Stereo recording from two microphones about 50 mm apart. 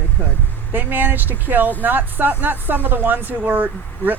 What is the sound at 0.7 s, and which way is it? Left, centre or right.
Speech, right.